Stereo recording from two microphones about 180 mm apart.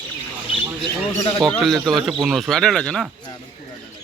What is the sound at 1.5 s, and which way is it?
Speech, centre (ahead or behind).